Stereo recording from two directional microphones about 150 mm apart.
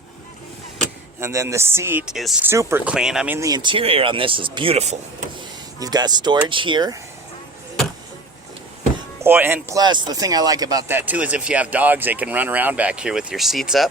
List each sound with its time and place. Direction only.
1.2 s speech: 20° right (ahead or behind)
2.1 s speech: centre (ahead or behind)
2.4 s speech: 15° right (ahead or behind)
3.3 s speech: 25° right (ahead or behind); by 4.9 s 45° right (ahead or behind)
5.8 s speech: 25° right (ahead or behind)
9.2 s speech: 15° right (ahead or behind)